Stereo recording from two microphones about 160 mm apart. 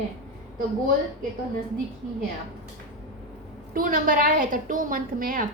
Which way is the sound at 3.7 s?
60° right (ahead or behind).